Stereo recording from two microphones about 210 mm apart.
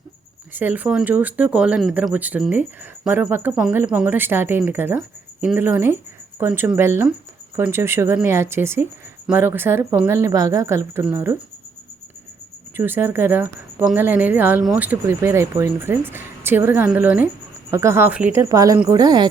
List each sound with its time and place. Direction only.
0.5 s speech: 10° right (ahead or behind)
12.7 s speech: 10° right (ahead or behind)